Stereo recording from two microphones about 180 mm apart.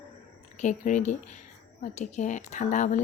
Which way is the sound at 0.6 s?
40° left (ahead or behind).